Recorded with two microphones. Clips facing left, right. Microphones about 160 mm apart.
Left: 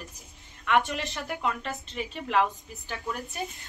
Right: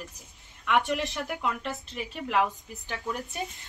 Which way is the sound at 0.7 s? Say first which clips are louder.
Even; 15° right (ahead or behind).